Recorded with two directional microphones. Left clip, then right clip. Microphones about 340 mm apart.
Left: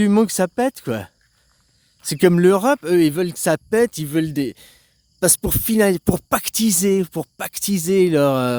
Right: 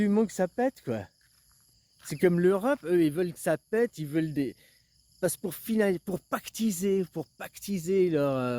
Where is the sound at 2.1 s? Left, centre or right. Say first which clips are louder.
Left 10 dB; left.